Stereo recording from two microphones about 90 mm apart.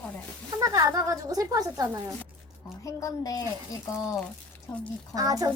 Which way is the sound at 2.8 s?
40° left (ahead or behind).